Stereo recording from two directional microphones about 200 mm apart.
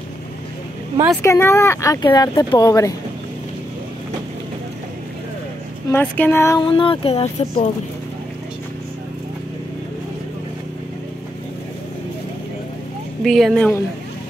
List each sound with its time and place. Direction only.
1.2 s speech: 15° left (ahead or behind)
5.9 s speech: 10° left (ahead or behind)
6.7 s speech: 25° left (ahead or behind)
13.2 s speech: centre (ahead or behind)